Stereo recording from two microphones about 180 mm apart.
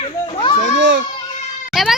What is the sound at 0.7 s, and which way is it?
Baby cry, 90° right.